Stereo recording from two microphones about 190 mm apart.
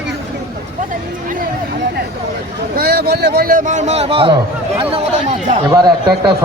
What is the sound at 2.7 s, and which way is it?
A man's voice, 50° right (ahead or behind).